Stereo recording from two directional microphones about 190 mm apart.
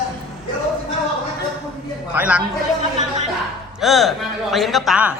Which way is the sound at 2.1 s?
5° right (ahead or behind).